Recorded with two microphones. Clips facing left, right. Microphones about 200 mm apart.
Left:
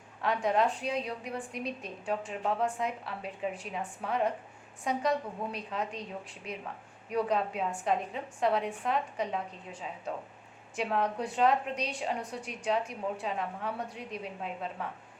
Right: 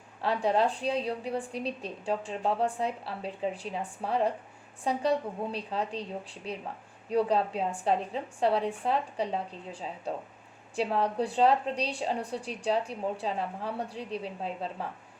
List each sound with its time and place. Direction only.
0.2 s a woman's voice: 30° right (ahead or behind)